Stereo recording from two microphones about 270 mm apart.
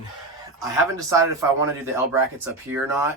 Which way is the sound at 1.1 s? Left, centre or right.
Centre.